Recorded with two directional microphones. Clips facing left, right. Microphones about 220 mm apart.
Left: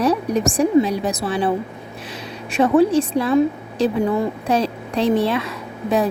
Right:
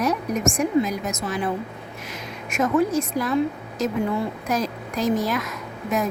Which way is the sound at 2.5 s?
30° left (ahead or behind).